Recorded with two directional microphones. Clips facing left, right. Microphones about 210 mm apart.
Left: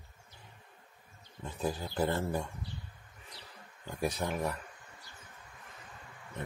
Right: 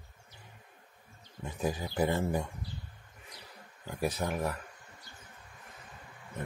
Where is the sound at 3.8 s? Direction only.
5° right (ahead or behind).